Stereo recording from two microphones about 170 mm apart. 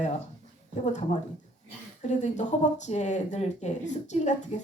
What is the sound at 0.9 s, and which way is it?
Speech, 45° left (ahead or behind).